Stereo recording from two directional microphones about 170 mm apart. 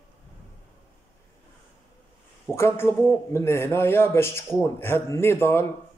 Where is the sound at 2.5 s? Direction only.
15° left (ahead or behind).